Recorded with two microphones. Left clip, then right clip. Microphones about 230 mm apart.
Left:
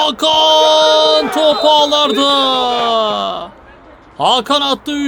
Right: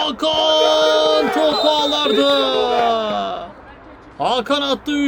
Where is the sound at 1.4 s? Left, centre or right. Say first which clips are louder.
Left 5 dB; left.